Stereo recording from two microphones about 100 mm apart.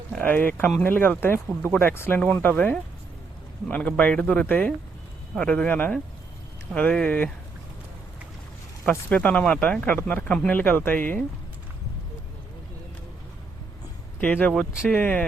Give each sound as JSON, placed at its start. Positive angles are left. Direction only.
{"t": 0.2, "sound": "speech", "side_deg": 20}
{"t": 8.9, "sound": "speech", "side_deg": 15}
{"t": 14.2, "sound": "speech", "side_deg": 15}